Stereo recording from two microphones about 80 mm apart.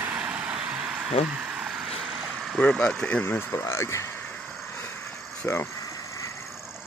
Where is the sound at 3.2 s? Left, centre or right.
Left.